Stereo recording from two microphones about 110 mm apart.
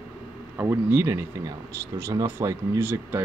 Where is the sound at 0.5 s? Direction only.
20° right (ahead or behind).